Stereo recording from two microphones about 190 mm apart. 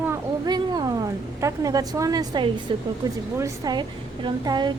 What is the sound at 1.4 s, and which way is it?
A woman's voice, 15° right (ahead or behind).